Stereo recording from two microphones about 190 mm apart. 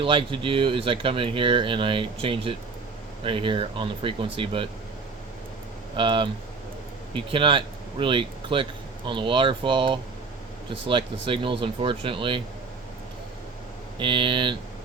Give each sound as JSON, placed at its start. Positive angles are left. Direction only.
{"t": 0.0, "sound": "speech", "side_deg": -25}
{"t": 6.0, "sound": "speech", "side_deg": -25}
{"t": 14.0, "sound": "speech", "side_deg": -25}